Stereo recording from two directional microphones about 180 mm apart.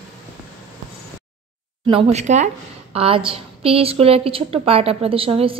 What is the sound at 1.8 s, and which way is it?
A woman's voice, 30° right (ahead or behind).